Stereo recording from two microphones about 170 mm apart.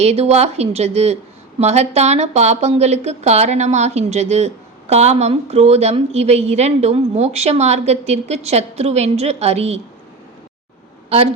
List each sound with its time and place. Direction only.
0.0 s a woman's voice: 40° right (ahead or behind)